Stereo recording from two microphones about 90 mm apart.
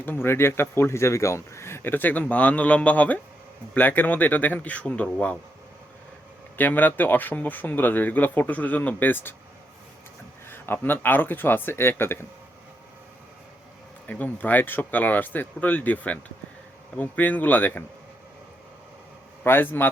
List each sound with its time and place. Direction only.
0.0 s speech: 25° left (ahead or behind)
6.6 s speech: 20° left (ahead or behind)
10.5 s speech: 25° left (ahead or behind)
14.1 s speech: 20° left (ahead or behind)
19.5 s speech: 20° left (ahead or behind)